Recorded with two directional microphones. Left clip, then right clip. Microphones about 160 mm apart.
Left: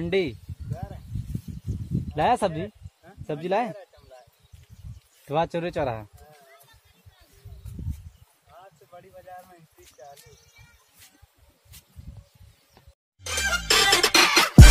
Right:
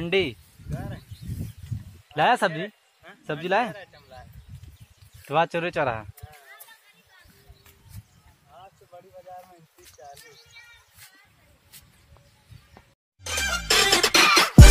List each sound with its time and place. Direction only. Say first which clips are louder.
0.0 s speech: right 1 dB; 5° right (ahead or behind)
2.1 s speech: right 2 dB; centre (ahead or behind)
3.7 s a sound: right 1 dB; 60° left (ahead or behind)
5.2 s speech: right 2 dB; centre (ahead or behind)
13.2 s music: left 1 dB; centre (ahead or behind)